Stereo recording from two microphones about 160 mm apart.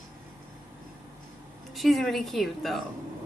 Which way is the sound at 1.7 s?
Centre (ahead or behind).